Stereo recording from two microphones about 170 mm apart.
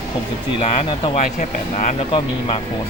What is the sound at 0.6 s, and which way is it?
Speech, 35° left (ahead or behind).